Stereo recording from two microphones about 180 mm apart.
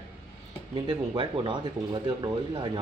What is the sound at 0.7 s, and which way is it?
Speech, 25° right (ahead or behind).